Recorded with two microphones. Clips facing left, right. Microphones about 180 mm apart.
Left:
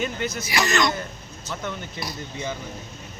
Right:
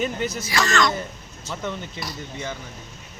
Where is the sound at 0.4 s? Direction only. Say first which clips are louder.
Even; 15° left (ahead or behind).